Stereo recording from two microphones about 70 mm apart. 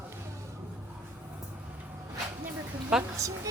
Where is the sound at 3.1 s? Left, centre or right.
Right.